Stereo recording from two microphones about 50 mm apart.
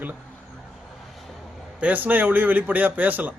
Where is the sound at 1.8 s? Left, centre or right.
Right.